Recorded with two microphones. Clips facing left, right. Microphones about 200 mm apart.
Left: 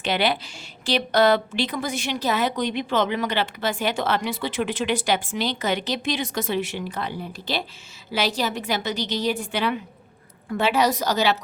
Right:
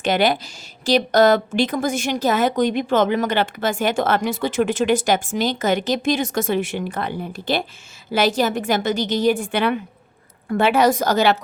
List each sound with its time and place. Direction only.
0.0 s a woman's voice: 45° right (ahead or behind)